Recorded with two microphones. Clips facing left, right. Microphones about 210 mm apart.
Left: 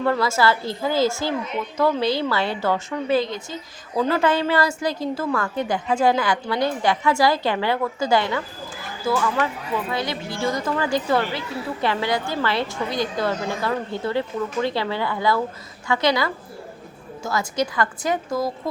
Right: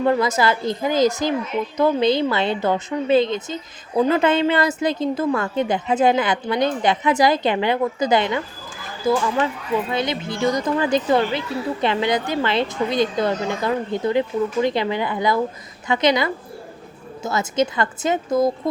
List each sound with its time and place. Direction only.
0.0 s a woman's voice: 20° right (ahead or behind)